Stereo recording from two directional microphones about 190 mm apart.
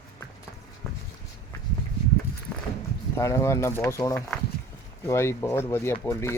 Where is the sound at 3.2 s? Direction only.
15° left (ahead or behind).